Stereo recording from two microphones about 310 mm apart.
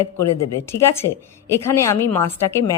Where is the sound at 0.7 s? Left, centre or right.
Centre.